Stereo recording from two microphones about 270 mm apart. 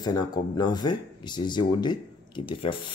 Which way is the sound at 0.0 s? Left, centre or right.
Centre.